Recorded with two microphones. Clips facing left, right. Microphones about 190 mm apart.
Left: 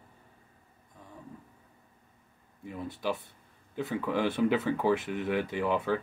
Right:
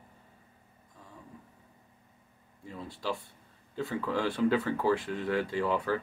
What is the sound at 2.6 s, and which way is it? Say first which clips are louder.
Speech: left 3 dB; 20° left (ahead or behind).